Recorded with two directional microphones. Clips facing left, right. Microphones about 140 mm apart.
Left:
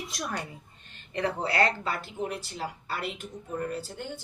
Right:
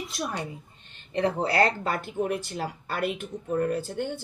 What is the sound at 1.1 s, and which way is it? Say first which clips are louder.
Speech: right 4 dB; 35° right (ahead or behind).